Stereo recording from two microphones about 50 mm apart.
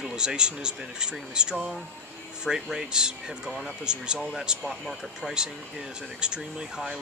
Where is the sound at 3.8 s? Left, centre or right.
Centre.